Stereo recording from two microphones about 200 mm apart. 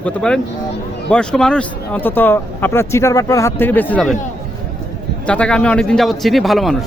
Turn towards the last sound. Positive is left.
turn(degrees=0)  # may be behind; listen again after turning